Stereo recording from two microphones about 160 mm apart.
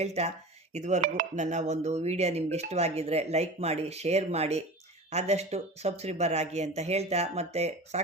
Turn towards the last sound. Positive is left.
turn(degrees=-40)  # may be behind; listen again after turning